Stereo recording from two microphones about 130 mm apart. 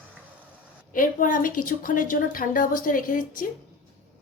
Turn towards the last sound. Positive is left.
turn(degrees=90)